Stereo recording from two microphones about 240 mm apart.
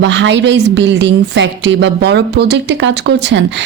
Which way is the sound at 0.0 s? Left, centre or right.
Right.